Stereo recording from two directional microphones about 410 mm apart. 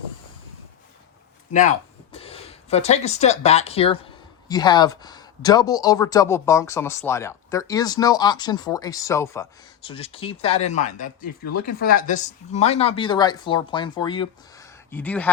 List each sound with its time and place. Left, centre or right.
2.1 s speech: centre